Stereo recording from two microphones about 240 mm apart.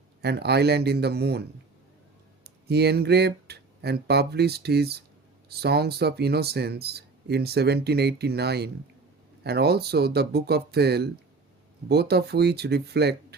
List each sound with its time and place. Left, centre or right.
0.2 s speech: right